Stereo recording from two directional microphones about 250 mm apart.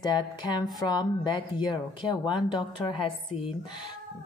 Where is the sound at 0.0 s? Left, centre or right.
Centre.